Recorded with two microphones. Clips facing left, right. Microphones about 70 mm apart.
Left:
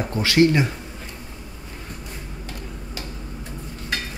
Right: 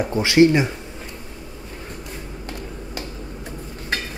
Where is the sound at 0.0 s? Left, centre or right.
Centre.